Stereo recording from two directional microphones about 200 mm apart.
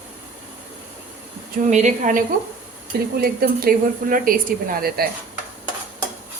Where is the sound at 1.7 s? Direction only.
40° right (ahead or behind).